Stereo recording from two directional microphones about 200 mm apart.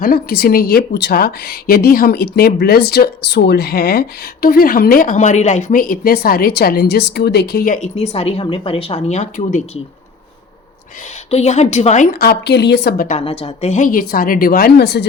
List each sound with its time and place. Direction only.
0.0 s a woman's voice: 50° left (ahead or behind)
11.3 s a woman's voice: 35° left (ahead or behind); by 13.1 s 55° left (ahead or behind)
13.1 s a woman's voice: 30° left (ahead or behind); by 15.0 s 55° left (ahead or behind)